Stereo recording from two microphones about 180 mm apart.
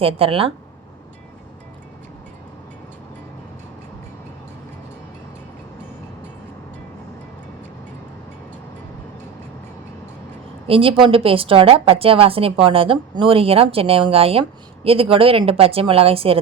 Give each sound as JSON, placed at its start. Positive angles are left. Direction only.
{"t": 0.0, "sound": "a woman's voice", "side_deg": -30}
{"t": 10.7, "sound": "a woman's voice", "side_deg": -30}